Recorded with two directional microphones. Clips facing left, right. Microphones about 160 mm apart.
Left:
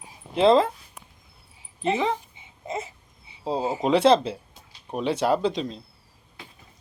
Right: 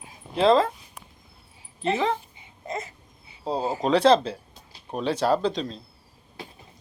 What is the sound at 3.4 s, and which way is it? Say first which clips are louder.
Speech: left 1 dB; 20° left (ahead or behind).